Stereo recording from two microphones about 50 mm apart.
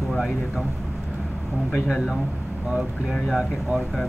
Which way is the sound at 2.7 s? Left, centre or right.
Centre.